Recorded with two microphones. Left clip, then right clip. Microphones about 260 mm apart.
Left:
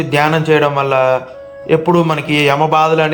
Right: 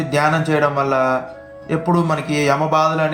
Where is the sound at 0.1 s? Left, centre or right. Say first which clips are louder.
Left 5 dB; left.